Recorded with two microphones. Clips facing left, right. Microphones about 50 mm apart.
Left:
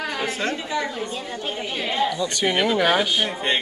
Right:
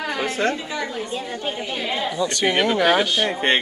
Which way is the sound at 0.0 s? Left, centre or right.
Centre.